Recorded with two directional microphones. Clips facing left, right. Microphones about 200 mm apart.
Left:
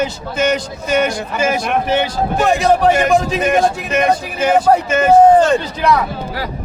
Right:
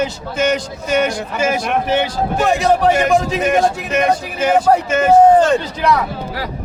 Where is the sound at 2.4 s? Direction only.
50° left (ahead or behind).